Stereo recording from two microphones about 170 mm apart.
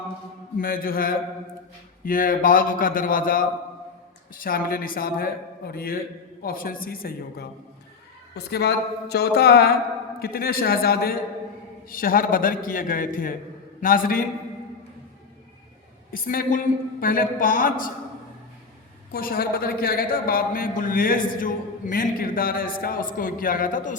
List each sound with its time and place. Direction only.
0.6 s a woman's voice: 60° left (ahead or behind)
8.4 s a woman's voice: 70° left (ahead or behind); by 14.3 s 55° left (ahead or behind)
16.1 s a man's voice: 55° left (ahead or behind)
19.1 s a woman's voice: 60° left (ahead or behind)